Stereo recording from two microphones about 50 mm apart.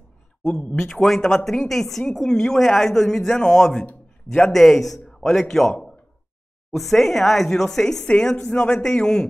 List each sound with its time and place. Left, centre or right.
0.5 s a woman's voice: left
1.0 s a woman's voice: centre